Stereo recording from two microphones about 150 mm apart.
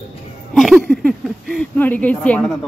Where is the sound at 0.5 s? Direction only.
Centre (ahead or behind).